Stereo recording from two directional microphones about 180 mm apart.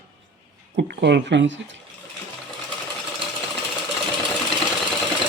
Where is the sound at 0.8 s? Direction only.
70° right (ahead or behind); by 1.8 s 90° right.